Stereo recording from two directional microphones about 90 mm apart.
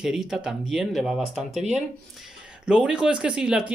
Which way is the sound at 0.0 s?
5° right (ahead or behind).